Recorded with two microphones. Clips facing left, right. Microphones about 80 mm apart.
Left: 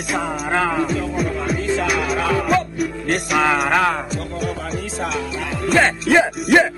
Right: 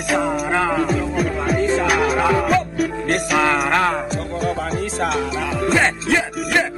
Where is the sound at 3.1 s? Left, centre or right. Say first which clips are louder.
Left 1 dB; centre.